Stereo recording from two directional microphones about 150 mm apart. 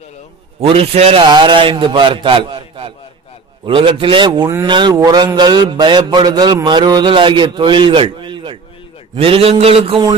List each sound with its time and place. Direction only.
0.6 s a man's voice: 40° right (ahead or behind)